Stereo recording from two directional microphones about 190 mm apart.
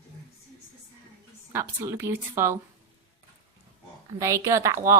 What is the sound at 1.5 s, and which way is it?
A woman's voice, 15° right (ahead or behind).